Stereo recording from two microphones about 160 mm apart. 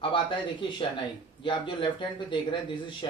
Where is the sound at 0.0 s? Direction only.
35° left (ahead or behind).